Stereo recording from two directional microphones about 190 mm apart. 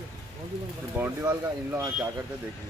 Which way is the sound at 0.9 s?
10° right (ahead or behind).